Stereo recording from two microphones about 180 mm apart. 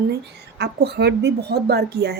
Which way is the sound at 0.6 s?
65° right (ahead or behind).